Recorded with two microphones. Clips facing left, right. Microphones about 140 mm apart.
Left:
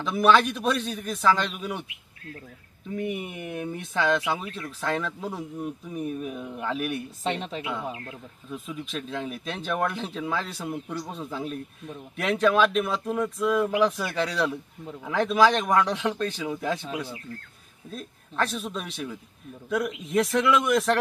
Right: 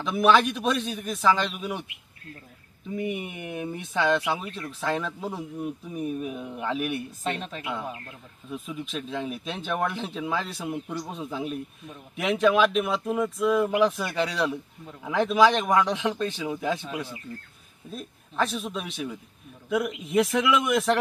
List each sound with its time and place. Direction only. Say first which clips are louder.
0.0 s speech: even; 5° right (ahead or behind)
2.9 s speech: even; 5° right (ahead or behind)
7.3 s a woman's voice: left 2 dB; 25° left (ahead or behind)
8.4 s speech: right 1 dB; centre (ahead or behind)